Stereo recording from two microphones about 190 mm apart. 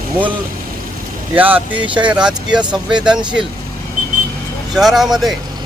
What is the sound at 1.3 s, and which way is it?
Speech, 10° right (ahead or behind).